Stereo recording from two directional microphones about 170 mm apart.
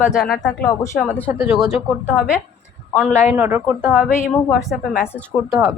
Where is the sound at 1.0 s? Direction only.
10° left (ahead or behind).